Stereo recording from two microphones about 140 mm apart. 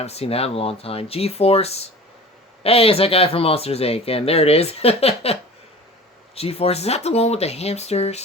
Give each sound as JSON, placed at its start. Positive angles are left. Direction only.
{"t": 0.0, "sound": "speech", "side_deg": 50}